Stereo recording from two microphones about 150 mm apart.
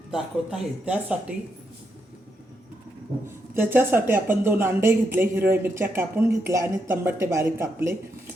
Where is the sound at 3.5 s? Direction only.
15° right (ahead or behind).